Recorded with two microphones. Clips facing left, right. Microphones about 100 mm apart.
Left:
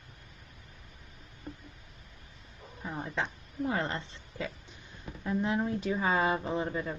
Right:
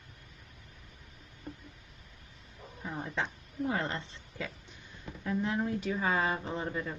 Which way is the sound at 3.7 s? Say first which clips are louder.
Left 2 dB; 30° left (ahead or behind).